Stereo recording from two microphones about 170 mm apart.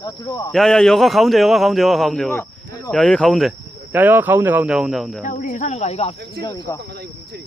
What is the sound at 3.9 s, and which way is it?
Speech, 10° right (ahead or behind).